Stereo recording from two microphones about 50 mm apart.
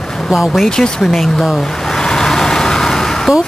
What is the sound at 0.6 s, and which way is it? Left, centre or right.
Speech, centre.